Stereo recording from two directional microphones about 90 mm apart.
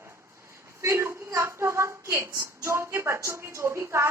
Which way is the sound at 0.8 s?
30° right (ahead or behind).